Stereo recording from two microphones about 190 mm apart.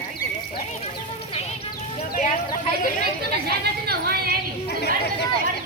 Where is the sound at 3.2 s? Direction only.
55° right (ahead or behind).